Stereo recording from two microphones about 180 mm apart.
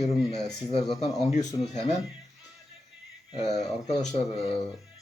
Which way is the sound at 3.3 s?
35° left (ahead or behind).